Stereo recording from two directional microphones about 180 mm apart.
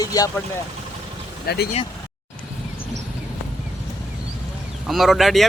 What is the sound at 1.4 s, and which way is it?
Speech, 60° left (ahead or behind).